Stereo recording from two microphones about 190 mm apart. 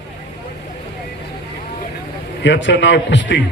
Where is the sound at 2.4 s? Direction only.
70° left (ahead or behind).